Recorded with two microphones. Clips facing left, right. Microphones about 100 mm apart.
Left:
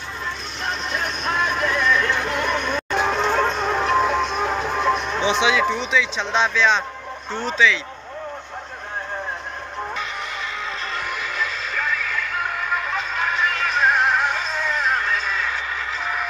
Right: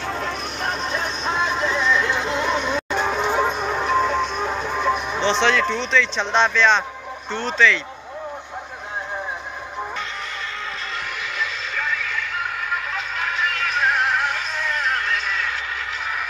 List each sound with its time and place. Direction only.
0.7 s music: 35° right (ahead or behind); by 2.8 s 20° right (ahead or behind)
2.9 s music: 5° right (ahead or behind)
5.2 s speech: 5° left (ahead or behind)
11.7 s music: centre (ahead or behind)